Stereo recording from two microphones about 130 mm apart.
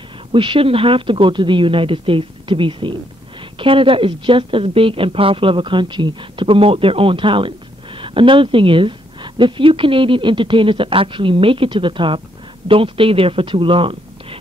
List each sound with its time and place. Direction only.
0.3 s a woman's voice: 40° right (ahead or behind)